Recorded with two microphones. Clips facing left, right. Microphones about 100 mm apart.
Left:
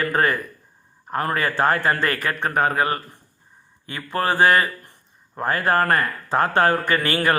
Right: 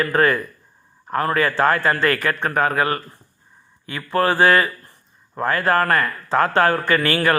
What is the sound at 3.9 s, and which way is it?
Speech, 45° right (ahead or behind).